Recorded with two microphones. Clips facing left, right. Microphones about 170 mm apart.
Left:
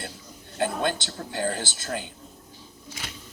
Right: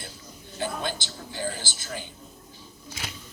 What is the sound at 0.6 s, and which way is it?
A woman's voice, 60° left (ahead or behind).